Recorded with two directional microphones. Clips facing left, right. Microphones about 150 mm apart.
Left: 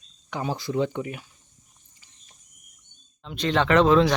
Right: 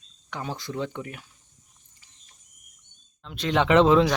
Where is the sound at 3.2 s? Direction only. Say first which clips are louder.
Even; 5° right (ahead or behind).